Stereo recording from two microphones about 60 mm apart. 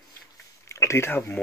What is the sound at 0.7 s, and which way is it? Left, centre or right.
Speech, left.